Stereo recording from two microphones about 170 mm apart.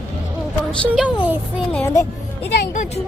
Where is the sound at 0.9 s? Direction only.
10° right (ahead or behind).